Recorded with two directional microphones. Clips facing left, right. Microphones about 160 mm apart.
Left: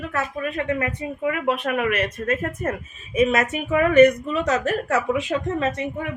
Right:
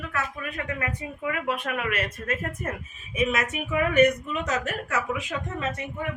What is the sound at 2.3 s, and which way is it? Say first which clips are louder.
Speech: left 6 dB; 50° left (ahead or behind).